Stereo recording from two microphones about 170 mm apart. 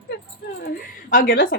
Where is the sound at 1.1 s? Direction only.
55° left (ahead or behind).